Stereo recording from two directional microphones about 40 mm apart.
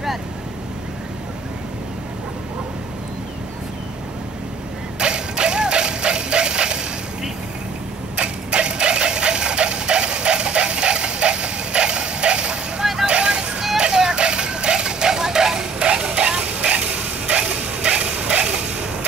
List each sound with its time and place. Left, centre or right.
4.9 s music: right
8.2 s vehicle: right
13.0 s music: right